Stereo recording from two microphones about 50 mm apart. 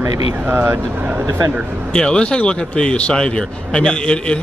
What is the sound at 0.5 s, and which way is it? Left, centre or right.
Speech, right.